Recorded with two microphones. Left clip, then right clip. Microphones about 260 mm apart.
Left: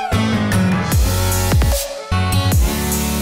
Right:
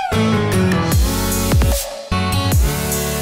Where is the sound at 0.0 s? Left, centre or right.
Centre.